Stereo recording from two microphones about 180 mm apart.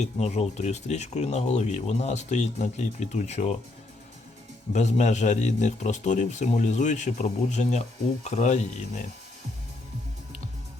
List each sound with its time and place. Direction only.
0.0 s a man's voice: 40° left (ahead or behind)
4.7 s a man's voice: 40° left (ahead or behind)